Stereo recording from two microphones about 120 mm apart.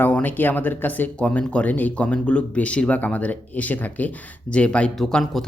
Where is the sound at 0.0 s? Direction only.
15° left (ahead or behind).